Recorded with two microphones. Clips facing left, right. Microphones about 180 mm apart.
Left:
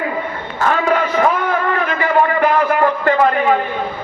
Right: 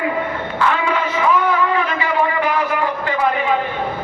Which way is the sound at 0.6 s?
45° left (ahead or behind).